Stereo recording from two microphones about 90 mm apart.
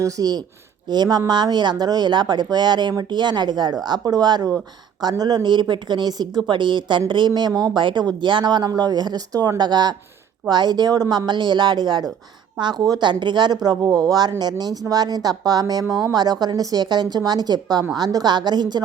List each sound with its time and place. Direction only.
0.0 s a woman's voice: 45° right (ahead or behind)